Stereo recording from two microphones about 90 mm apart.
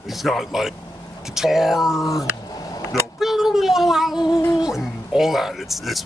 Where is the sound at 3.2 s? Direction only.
5° right (ahead or behind).